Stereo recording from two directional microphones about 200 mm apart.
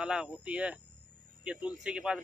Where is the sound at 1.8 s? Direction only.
5° right (ahead or behind).